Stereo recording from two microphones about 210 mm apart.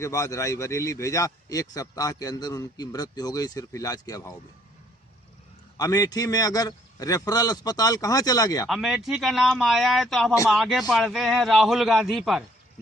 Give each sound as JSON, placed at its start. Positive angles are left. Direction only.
{"t": 0.0, "sound": "a man's voice", "side_deg": 15}
{"t": 5.7, "sound": "a man's voice", "side_deg": 15}
{"t": 8.6, "sound": "a man's voice", "side_deg": 0}